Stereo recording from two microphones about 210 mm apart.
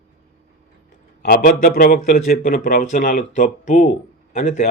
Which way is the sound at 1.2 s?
40° left (ahead or behind).